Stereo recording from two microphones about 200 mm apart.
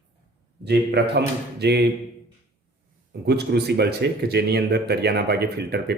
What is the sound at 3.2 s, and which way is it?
Speech, 55° right (ahead or behind).